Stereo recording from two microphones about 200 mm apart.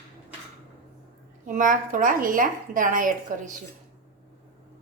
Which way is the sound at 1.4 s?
40° right (ahead or behind).